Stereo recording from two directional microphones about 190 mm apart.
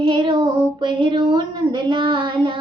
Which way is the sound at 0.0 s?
25° right (ahead or behind).